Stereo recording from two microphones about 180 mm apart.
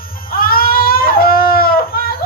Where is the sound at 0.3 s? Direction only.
55° left (ahead or behind).